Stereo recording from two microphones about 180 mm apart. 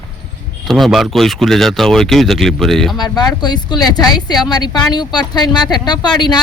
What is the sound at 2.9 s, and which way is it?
A woman's voice, 20° left (ahead or behind).